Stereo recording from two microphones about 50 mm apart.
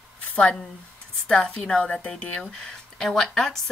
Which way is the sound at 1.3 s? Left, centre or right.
Centre.